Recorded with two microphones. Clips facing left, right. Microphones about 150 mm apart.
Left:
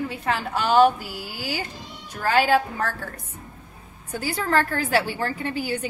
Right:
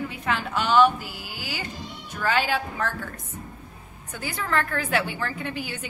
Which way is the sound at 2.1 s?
40° left (ahead or behind).